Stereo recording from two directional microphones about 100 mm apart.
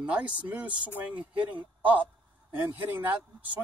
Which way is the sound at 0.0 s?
15° right (ahead or behind).